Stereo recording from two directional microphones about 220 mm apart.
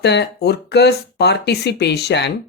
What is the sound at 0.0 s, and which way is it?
Speech, 50° left (ahead or behind).